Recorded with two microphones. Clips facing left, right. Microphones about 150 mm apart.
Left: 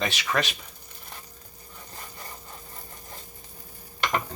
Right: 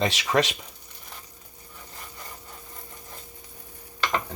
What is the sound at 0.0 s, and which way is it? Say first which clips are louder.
Speech: right 4 dB; 20° right (ahead or behind).